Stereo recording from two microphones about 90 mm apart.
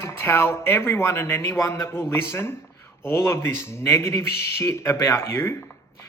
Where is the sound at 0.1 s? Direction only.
30° left (ahead or behind).